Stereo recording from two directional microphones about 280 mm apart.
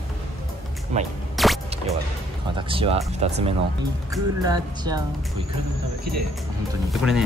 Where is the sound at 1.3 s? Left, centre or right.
Centre.